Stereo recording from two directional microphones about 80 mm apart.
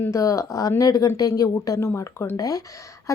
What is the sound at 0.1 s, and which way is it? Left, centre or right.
A woman's voice, left.